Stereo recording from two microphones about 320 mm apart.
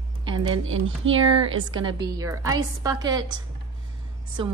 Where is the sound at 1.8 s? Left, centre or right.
Centre.